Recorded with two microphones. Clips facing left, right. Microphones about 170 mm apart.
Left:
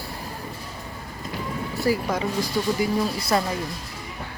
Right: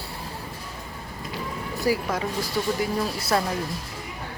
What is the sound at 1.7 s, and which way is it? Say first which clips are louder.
Music: left 1 dB; 15° right (ahead or behind).